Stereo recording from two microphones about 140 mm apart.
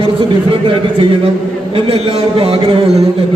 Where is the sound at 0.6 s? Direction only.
40° right (ahead or behind).